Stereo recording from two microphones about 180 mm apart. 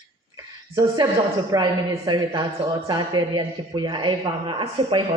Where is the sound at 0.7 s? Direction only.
20° right (ahead or behind).